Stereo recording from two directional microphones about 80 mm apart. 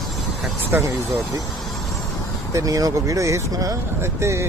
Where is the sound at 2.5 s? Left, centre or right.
Right.